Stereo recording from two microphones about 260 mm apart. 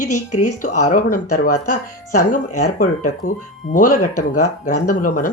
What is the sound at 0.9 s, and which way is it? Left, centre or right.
Speech, left.